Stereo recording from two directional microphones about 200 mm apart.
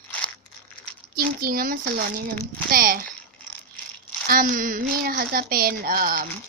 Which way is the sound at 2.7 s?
45° right (ahead or behind).